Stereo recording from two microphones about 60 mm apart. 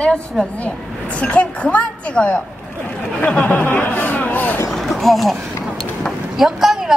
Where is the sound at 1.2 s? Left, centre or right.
Left.